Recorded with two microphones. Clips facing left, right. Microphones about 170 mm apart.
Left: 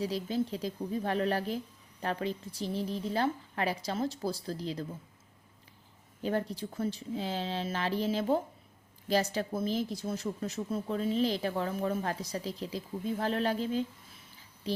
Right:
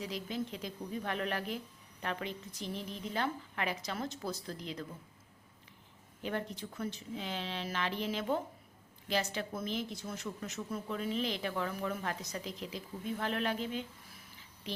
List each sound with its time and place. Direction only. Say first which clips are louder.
0.0 s speech: left 7 dB; 35° left (ahead or behind)
6.2 s speech: left 6 dB; 35° left (ahead or behind)